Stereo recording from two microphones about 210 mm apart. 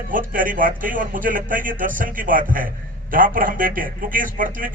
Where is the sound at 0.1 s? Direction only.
40° right (ahead or behind).